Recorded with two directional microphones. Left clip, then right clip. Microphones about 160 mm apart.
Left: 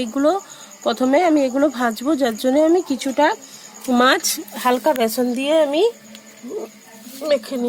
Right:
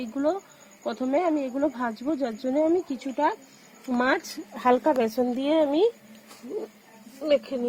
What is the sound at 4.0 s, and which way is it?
Speech, 10° left (ahead or behind).